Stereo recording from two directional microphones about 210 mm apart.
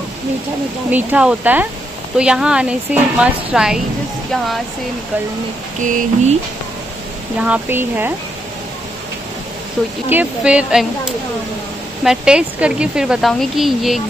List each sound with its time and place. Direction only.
0.8 s speech: 5° right (ahead or behind)
5.8 s speech: 35° right (ahead or behind)
7.3 s speech: 5° right (ahead or behind)
10.1 s speech: 5° right (ahead or behind)